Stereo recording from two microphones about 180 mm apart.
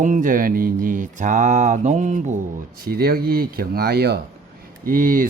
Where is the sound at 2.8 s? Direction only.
60° right (ahead or behind).